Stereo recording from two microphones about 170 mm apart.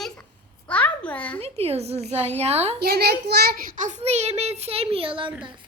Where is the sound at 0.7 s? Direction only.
10° left (ahead or behind).